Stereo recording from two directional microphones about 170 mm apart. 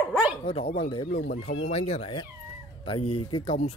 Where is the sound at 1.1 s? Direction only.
70° left (ahead or behind).